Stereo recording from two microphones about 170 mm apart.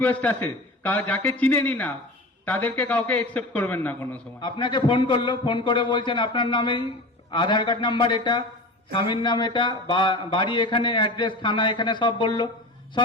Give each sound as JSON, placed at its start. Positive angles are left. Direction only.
{"t": 0.0, "sound": "a man's voice", "side_deg": 10}
{"t": 4.4, "sound": "speech", "side_deg": 25}